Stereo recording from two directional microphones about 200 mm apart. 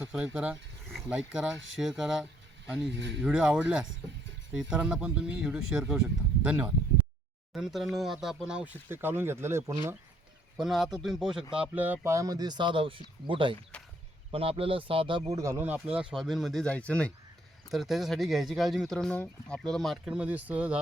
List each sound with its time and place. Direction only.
0.0 s speech: 5° right (ahead or behind)
2.9 s speech: 60° right (ahead or behind)
3.2 s speech: 5° right (ahead or behind)
10.6 s speech: centre (ahead or behind); by 15.4 s 30° right (ahead or behind)
15.4 s speech: 15° right (ahead or behind)